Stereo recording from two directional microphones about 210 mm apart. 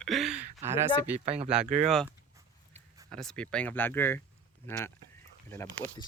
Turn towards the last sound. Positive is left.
turn(degrees=10)  # may be behind; listen again after turning